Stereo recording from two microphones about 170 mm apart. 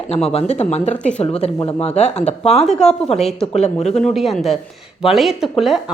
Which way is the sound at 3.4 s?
40° left (ahead or behind).